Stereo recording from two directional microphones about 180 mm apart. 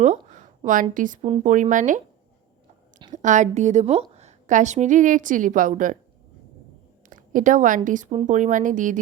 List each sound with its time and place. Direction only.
0.0 s speech: 40° right (ahead or behind)
3.1 s a woman's voice: 45° right (ahead or behind)
7.1 s a sound: 45° right (ahead or behind)
7.9 s speech: 45° right (ahead or behind)